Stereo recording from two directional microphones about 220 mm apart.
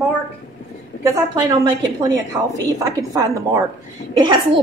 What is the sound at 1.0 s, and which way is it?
A woman's voice, 15° right (ahead or behind).